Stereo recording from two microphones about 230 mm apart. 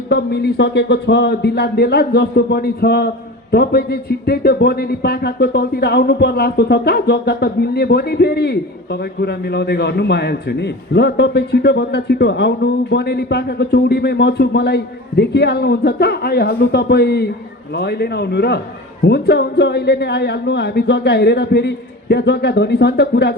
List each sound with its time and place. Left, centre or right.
0.1 s speech: left